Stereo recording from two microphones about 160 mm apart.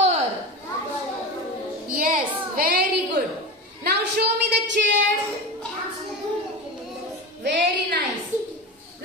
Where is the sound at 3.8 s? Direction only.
90° right.